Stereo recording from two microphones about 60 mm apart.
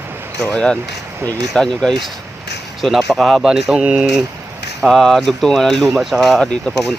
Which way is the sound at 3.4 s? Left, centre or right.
Centre.